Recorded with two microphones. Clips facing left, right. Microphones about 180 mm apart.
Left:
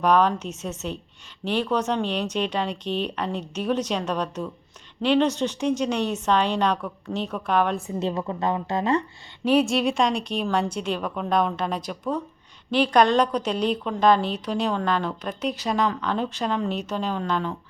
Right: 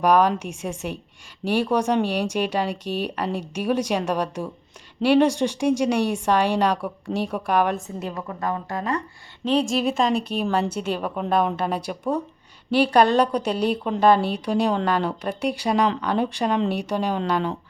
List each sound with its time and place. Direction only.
0.0 s speech: 10° right (ahead or behind)
7.9 s a woman's voice: 25° left (ahead or behind)
9.4 s a woman's voice: 5° left (ahead or behind); by 17.5 s 15° right (ahead or behind)